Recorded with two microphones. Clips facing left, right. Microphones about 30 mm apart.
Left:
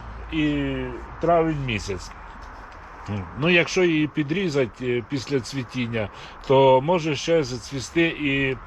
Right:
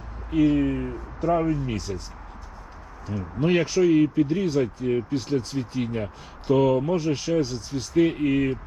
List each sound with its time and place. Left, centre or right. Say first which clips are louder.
0.3 s speech: right 3 dB; left
0.5 s speech: right 2 dB; left
1.5 s speech: even; left
3.1 s speech: left 2 dB; left